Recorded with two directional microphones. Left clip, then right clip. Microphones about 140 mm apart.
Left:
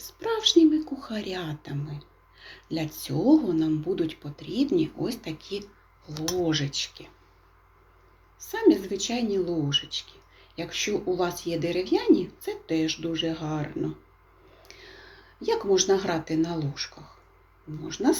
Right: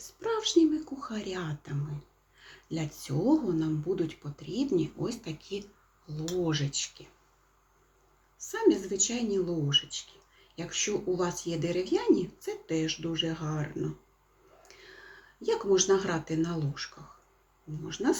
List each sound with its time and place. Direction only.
0.1 s a woman's voice: 15° right (ahead or behind)
8.4 s a woman's voice: 20° right (ahead or behind)
17.8 s a woman's voice: 15° right (ahead or behind)